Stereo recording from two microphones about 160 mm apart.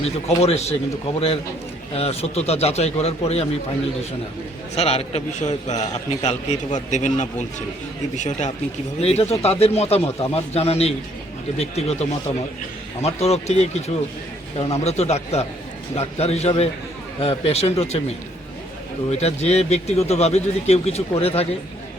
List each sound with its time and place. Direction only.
0.0 s a man's voice: 40° left (ahead or behind)
1.9 s a man's voice: 40° left (ahead or behind)
4.7 s a man's voice: 40° left (ahead or behind)
19.1 s a man's voice: 45° left (ahead or behind)